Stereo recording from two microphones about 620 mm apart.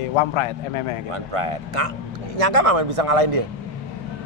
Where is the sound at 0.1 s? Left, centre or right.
Left.